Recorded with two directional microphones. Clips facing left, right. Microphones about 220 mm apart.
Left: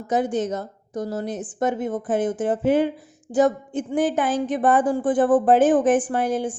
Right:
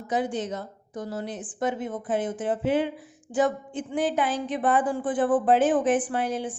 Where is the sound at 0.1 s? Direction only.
45° left (ahead or behind).